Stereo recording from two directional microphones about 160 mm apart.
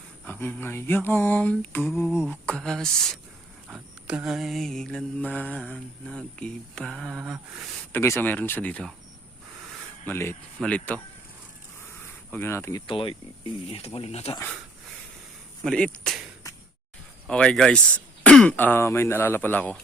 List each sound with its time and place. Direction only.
0.3 s speech: 10° left (ahead or behind)
2.0 s mantra: 5° right (ahead or behind)
7.9 s speech: 15° left (ahead or behind)
10.1 s speech: 15° left (ahead or behind)
12.3 s speech: 15° left (ahead or behind)
12.9 s speech: 30° left (ahead or behind)
15.6 s mantra: 5° left (ahead or behind)
18.2 s speech: 10° left (ahead or behind)